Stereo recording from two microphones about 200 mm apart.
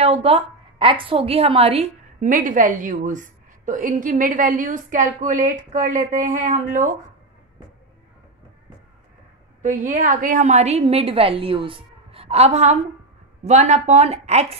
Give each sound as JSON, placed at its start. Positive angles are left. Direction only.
{"t": 0.0, "sound": "a woman's voice", "side_deg": -30}
{"t": 9.6, "sound": "a woman's voice", "side_deg": -40}